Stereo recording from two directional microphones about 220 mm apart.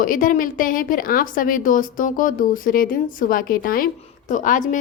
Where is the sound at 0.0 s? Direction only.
40° left (ahead or behind).